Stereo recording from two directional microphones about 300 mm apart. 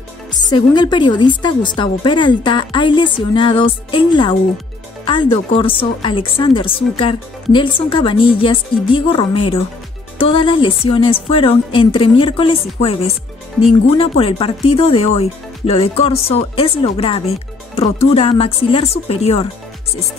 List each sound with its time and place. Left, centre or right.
0.5 s speech: centre
13.8 s speech: centre